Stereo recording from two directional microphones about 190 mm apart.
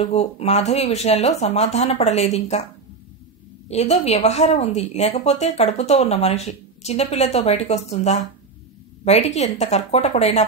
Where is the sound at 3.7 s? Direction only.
35° left (ahead or behind).